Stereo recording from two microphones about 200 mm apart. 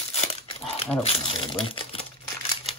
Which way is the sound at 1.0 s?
30° left (ahead or behind).